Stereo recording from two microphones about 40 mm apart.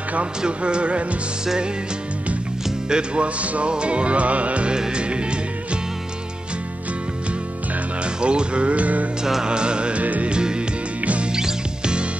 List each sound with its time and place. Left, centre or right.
0.4 s music: right
2.9 s music: right
4.7 s music: right
8.0 s music: right
9.2 s music: centre
10.0 s music: right
10.3 s music: right